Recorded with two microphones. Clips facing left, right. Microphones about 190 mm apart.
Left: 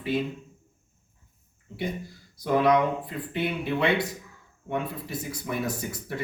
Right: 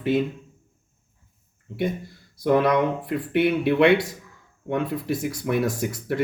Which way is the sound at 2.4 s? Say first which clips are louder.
Right 2 dB; 60° right (ahead or behind).